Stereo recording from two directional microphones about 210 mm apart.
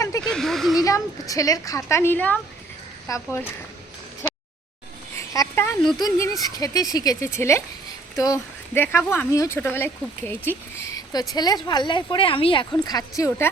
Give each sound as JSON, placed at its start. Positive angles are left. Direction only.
{"t": 0.3, "sound": "speech", "side_deg": 0}
{"t": 0.8, "sound": "speech", "side_deg": 15}
{"t": 4.2, "sound": "a sound", "side_deg": 10}
{"t": 6.0, "sound": "speech", "side_deg": 15}